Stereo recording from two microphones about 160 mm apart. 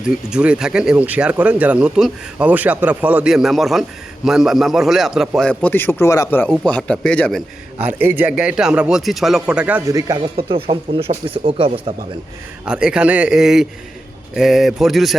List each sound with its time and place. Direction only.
0.0 s a man's voice: 5° right (ahead or behind)
7.9 s speech: 10° right (ahead or behind)
9.9 s speech: 25° right (ahead or behind)
12.6 s a man's voice: 5° right (ahead or behind)